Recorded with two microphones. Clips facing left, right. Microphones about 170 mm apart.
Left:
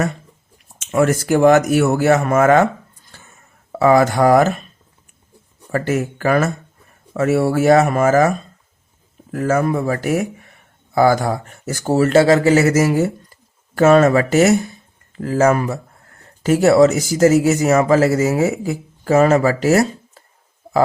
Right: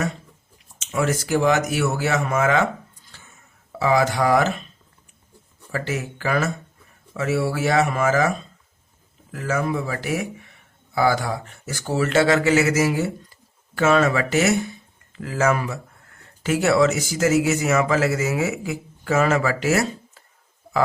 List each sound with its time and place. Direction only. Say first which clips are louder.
0.8 s speech: left 7 dB; 55° left (ahead or behind)
3.1 s a sound: left 5 dB; 45° left (ahead or behind)
3.7 s speech: left 6 dB; 55° left (ahead or behind)
5.7 s speech: left 8 dB; 50° left (ahead or behind)